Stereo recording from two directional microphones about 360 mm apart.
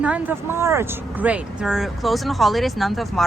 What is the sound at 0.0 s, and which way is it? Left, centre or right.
Speech, centre.